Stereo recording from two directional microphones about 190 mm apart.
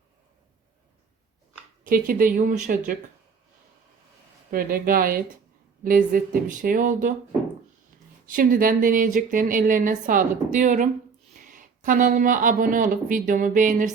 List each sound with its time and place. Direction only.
1.8 s speech: 45° right (ahead or behind)
4.5 s speech: 50° right (ahead or behind)
8.3 s speech: 45° right (ahead or behind)